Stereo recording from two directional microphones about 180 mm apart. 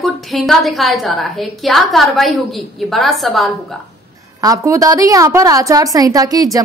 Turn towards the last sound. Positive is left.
turn(degrees=-20)  # may be behind; listen again after turning